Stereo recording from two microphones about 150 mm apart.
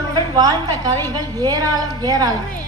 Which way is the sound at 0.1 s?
25° right (ahead or behind).